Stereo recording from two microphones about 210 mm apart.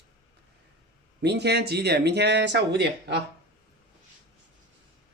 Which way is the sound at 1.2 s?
50° right (ahead or behind).